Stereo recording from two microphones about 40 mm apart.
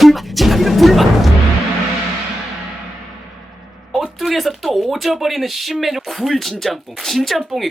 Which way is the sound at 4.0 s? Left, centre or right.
Centre.